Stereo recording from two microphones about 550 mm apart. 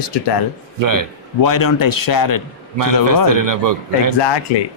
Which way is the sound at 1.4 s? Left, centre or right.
Left.